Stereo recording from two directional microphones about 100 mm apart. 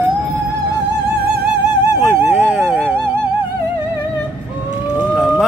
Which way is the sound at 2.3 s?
10° right (ahead or behind).